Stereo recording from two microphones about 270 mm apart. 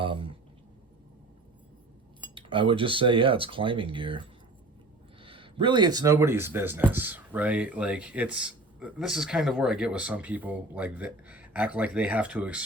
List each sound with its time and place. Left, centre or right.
0.0 s a sound: centre
2.3 s speech: centre
5.2 s speech: centre